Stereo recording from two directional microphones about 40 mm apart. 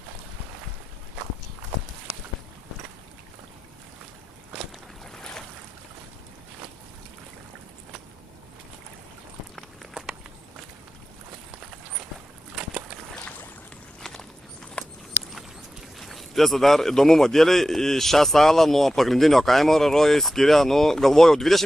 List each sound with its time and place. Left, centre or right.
5.1 s boat: centre
14.0 s walk: centre
14.8 s clip-clop: left
16.0 s a man's voice: centre